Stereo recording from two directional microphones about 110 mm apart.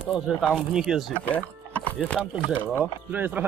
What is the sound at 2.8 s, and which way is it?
Speech, 15° right (ahead or behind).